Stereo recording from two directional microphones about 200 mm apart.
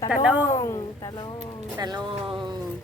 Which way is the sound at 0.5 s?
15° left (ahead or behind).